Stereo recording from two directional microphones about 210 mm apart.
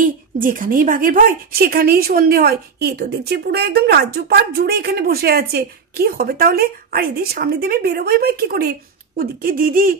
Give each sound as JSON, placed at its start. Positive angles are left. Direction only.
{"t": 0.0, "sound": "a woman's voice", "side_deg": -40}